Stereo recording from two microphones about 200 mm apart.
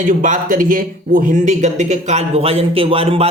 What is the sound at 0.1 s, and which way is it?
Speech, 40° right (ahead or behind).